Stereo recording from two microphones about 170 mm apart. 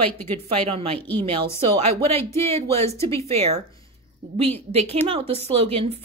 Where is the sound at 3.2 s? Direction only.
35° right (ahead or behind).